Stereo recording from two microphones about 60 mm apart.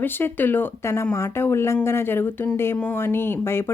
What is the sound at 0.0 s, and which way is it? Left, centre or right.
Speech, left.